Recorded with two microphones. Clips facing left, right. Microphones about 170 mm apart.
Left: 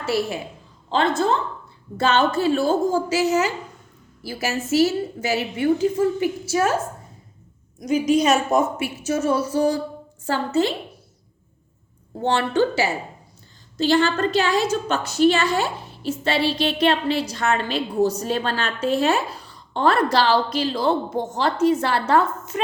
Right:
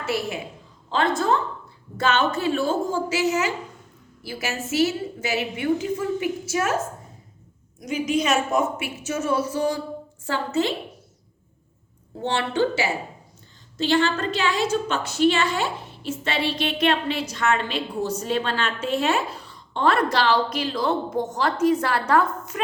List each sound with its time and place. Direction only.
0.0 s a woman's voice: 35° left (ahead or behind)
7.8 s a woman's voice: 40° left (ahead or behind)
12.2 s a woman's voice: 45° left (ahead or behind); by 22.6 s 25° left (ahead or behind)